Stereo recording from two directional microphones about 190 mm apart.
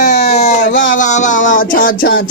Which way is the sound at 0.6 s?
75° left (ahead or behind).